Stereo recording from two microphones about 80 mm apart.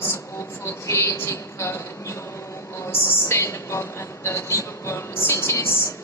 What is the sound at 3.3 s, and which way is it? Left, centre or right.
A woman's voice, left.